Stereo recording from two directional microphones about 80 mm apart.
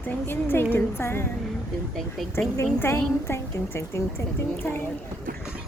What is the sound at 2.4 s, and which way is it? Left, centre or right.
A woman's voice, left.